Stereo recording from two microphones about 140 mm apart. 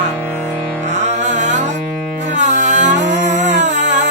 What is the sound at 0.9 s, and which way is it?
Music, 55° right (ahead or behind).